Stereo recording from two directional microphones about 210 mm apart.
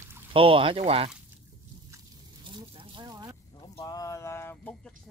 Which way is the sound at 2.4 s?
25° right (ahead or behind).